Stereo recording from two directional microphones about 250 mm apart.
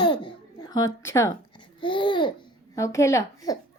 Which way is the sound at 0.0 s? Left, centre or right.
Centre.